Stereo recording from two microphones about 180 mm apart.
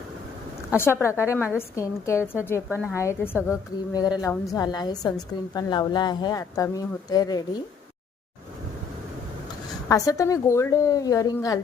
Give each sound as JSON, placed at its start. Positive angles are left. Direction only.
{"t": 0.8, "sound": "a woman's voice", "side_deg": 15}
{"t": 9.9, "sound": "a woman's voice", "side_deg": 20}